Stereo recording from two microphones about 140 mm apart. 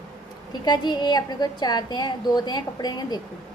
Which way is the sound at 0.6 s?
30° left (ahead or behind).